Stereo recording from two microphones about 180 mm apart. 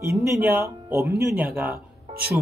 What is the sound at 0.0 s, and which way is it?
Speech, 15° right (ahead or behind).